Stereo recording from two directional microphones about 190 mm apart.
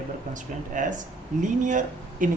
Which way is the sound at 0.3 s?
40° right (ahead or behind).